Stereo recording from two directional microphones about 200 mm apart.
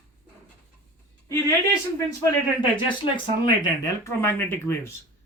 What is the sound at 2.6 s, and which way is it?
Speech, 25° left (ahead or behind).